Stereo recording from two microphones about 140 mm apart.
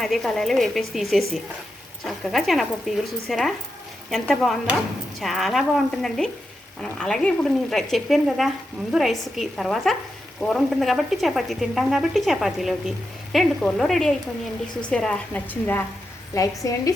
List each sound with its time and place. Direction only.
0.0 s a woman's voice: centre (ahead or behind)
16.3 s a woman's voice: 25° left (ahead or behind)